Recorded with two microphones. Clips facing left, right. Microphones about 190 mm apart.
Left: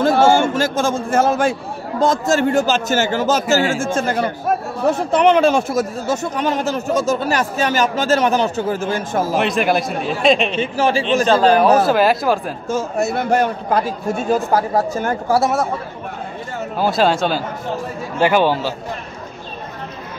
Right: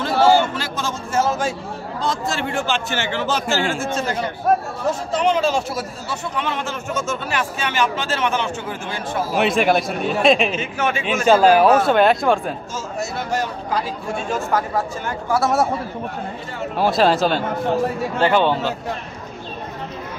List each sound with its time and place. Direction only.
0.0 s a man's voice: 50° left (ahead or behind)
2.0 s a man's voice: 45° left (ahead or behind)
4.8 s speech: 60° left (ahead or behind)
9.4 s speech: centre (ahead or behind)
10.6 s speech: 30° left (ahead or behind)
11.2 s speech: 10° right (ahead or behind)
11.8 s speech: 5° left (ahead or behind)
12.6 s a man's voice: 60° left (ahead or behind); by 15.4 s 40° left (ahead or behind)
16.7 s speech: centre (ahead or behind)